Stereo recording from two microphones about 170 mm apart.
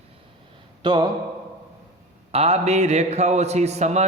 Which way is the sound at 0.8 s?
25° right (ahead or behind).